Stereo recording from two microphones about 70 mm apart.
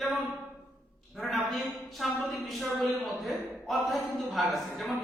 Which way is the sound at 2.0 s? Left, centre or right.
Centre.